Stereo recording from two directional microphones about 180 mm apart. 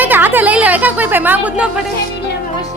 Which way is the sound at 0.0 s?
10° right (ahead or behind).